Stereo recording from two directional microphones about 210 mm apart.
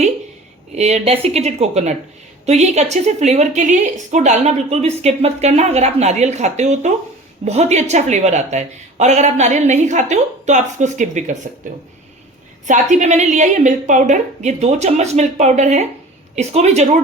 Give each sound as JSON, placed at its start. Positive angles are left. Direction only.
{"t": 0.8, "sound": "a woman's voice", "side_deg": -30}
{"t": 12.6, "sound": "a woman's voice", "side_deg": -35}